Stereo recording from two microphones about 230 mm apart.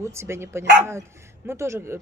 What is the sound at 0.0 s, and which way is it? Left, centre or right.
Speech, centre.